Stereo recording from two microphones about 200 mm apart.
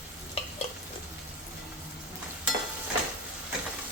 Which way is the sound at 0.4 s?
30° left (ahead or behind).